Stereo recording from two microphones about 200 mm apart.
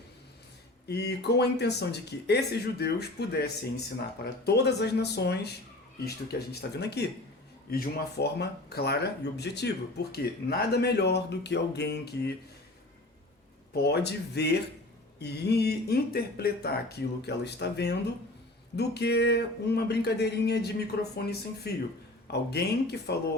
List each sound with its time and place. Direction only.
0.9 s speech: 55° left (ahead or behind)
13.8 s speech: 55° left (ahead or behind)